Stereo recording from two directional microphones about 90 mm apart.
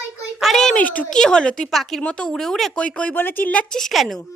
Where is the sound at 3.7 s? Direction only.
Centre (ahead or behind).